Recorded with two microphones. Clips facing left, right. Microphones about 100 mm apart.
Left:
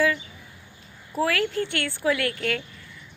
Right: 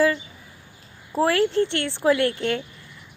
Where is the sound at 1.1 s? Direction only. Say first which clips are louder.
Right 5 dB; 30° right (ahead or behind).